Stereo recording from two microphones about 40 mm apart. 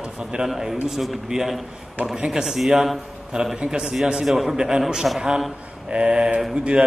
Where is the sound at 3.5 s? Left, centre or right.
Right.